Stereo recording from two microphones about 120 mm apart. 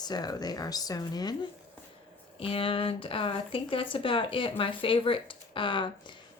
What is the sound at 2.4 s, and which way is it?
Speech, 50° left (ahead or behind).